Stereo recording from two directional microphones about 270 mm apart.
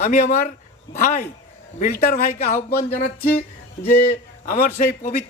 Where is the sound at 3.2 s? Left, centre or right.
Centre.